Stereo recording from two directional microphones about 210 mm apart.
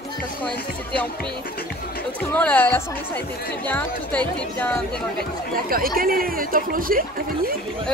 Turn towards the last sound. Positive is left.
turn(degrees=-45)  # may be behind; listen again after turning